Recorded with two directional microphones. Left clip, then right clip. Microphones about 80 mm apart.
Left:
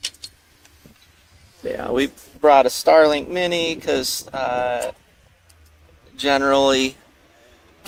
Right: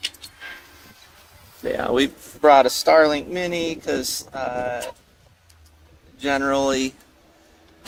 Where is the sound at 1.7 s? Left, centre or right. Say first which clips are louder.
Right 1 dB; centre.